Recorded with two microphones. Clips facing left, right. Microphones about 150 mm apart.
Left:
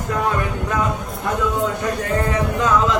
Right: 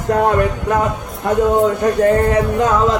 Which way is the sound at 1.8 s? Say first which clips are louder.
Right 8 dB; 50° right (ahead or behind).